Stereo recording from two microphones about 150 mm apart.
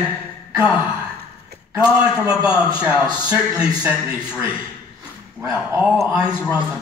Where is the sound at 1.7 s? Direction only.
10° right (ahead or behind).